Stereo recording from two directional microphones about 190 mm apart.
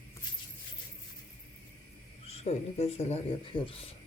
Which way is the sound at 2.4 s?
35° left (ahead or behind).